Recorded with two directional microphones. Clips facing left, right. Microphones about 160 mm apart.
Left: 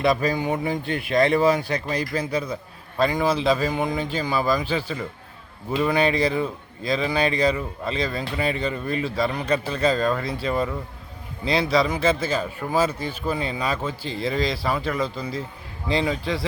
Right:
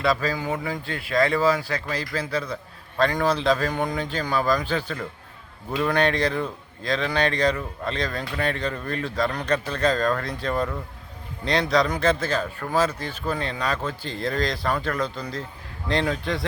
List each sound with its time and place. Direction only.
0.0 s a man's voice: 20° left (ahead or behind); by 16.5 s centre (ahead or behind)